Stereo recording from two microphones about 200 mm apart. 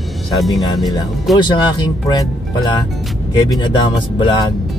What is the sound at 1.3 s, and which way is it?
Speech, 25° left (ahead or behind).